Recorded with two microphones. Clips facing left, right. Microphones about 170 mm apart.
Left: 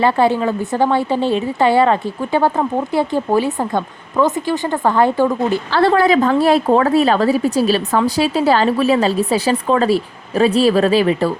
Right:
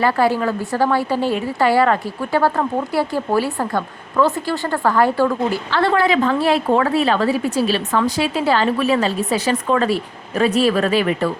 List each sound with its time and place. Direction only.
0.0 s a woman's voice: 25° left (ahead or behind)
5.7 s a woman's voice: 35° left (ahead or behind)